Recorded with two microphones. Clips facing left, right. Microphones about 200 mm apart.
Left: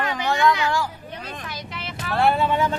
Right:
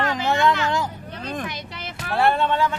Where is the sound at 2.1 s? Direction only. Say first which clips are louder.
Even; centre (ahead or behind).